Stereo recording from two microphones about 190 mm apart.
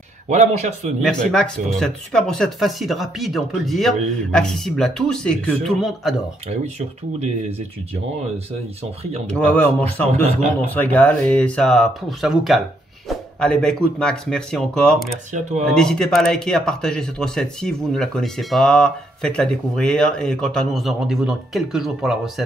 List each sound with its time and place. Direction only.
0.3 s speech: 40° right (ahead or behind)
1.0 s speech: 5° left (ahead or behind)
7.2 s speech: 35° right (ahead or behind)
9.3 s speech: 10° left (ahead or behind)